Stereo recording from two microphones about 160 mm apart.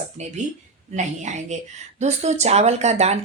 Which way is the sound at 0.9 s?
50° right (ahead or behind).